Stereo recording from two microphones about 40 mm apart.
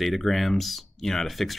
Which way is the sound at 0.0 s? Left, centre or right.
Centre.